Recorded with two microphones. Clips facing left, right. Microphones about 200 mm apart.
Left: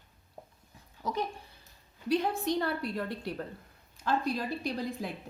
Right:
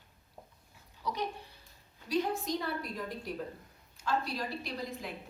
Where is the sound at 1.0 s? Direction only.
45° left (ahead or behind).